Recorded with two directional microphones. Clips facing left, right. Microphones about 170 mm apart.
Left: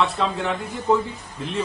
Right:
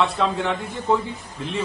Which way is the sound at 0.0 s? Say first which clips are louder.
Right 1 dB; centre (ahead or behind).